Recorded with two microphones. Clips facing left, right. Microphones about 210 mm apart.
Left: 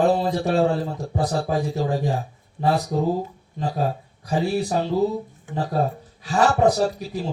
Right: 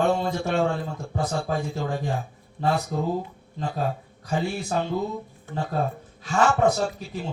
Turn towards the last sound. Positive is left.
turn(degrees=35)  # may be behind; listen again after turning